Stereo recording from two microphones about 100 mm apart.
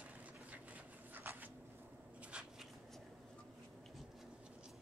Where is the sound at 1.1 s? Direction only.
20° right (ahead or behind).